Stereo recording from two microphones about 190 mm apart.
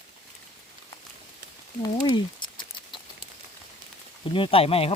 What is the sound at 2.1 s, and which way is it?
Patter, 25° left (ahead or behind).